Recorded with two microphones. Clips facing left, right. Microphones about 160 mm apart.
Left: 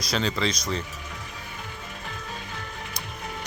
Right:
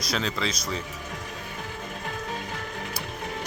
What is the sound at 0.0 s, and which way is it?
Speech, centre (ahead or behind).